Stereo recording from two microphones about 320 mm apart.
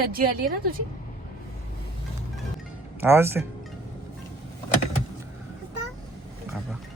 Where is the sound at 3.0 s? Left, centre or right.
Centre.